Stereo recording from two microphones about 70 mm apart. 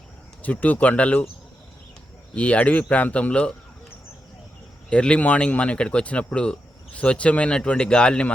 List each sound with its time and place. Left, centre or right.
0.4 s speech: left
2.3 s speech: centre
4.9 s speech: centre